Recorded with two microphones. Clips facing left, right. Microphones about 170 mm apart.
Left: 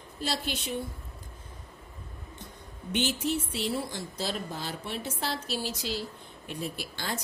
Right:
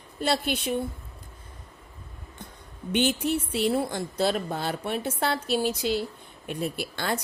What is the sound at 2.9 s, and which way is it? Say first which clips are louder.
Speech: right 4 dB; 60° right (ahead or behind).